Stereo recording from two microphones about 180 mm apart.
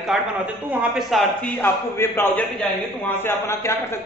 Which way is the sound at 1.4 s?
10° left (ahead or behind).